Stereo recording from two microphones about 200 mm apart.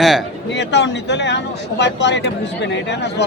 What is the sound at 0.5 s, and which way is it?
Speech, 60° left (ahead or behind).